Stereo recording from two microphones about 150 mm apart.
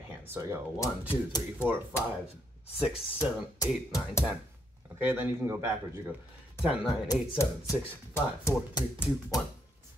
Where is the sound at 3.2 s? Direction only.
20° left (ahead or behind).